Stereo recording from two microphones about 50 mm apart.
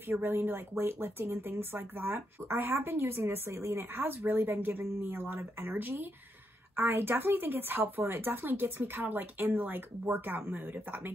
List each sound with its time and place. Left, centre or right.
0.1 s speech: right